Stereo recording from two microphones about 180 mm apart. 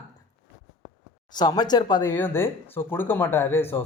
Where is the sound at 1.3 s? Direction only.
25° left (ahead or behind).